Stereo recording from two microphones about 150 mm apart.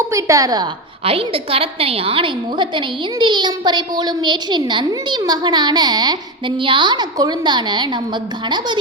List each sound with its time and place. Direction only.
0.1 s a woman's voice: 20° right (ahead or behind)
1.0 s a woman's voice: 40° right (ahead or behind)